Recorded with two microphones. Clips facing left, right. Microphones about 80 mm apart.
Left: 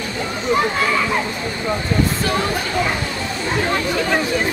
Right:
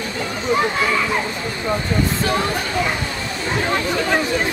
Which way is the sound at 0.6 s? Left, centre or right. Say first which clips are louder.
Left 1 dB; centre.